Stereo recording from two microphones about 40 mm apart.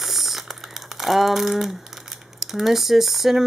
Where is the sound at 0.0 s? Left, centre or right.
Centre.